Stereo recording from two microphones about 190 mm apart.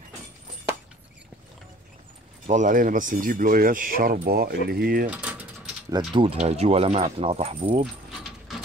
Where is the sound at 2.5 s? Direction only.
40° right (ahead or behind).